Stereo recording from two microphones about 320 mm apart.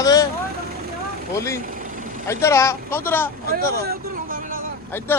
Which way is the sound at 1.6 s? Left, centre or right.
Right.